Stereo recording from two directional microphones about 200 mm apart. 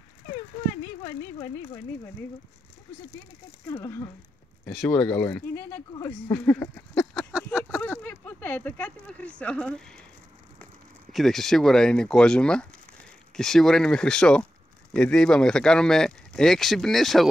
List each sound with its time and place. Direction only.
3.6 s speech: 15° left (ahead or behind)
4.6 s speech: 5° left (ahead or behind)
7.2 s a sound: 5° left (ahead or behind)
9.4 s speech: 5° left (ahead or behind)